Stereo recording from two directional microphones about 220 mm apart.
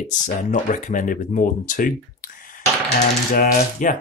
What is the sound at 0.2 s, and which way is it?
Speech, 35° left (ahead or behind).